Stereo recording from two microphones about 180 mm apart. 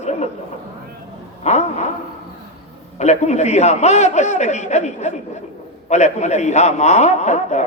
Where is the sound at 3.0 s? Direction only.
40° left (ahead or behind).